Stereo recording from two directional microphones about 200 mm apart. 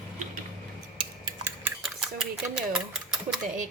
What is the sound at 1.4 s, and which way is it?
Cutlery, 5° right (ahead or behind).